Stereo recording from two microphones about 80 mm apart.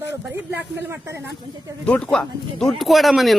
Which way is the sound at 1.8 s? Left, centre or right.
Centre.